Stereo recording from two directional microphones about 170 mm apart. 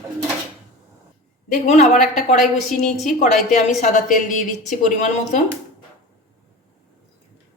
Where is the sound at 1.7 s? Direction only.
40° left (ahead or behind).